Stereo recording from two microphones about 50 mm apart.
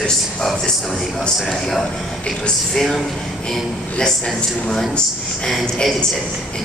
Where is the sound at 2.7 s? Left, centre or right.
Centre.